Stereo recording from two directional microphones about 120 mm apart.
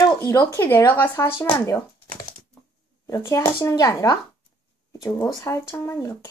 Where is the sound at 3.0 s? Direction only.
25° left (ahead or behind).